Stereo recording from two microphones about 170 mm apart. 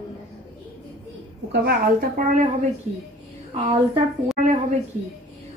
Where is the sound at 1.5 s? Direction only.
65° right (ahead or behind); by 2.4 s 50° right (ahead or behind).